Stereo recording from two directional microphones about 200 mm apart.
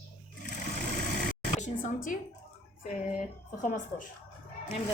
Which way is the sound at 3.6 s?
40° left (ahead or behind).